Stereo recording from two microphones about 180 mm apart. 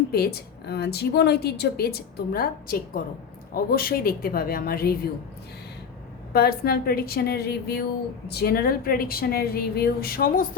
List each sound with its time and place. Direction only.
0.1 s a woman's voice: 60° left (ahead or behind)
6.3 s a woman's voice: 60° left (ahead or behind)